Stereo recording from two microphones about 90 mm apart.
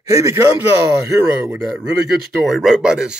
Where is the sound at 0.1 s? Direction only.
35° right (ahead or behind).